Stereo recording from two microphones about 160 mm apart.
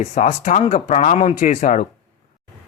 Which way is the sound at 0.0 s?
50° left (ahead or behind).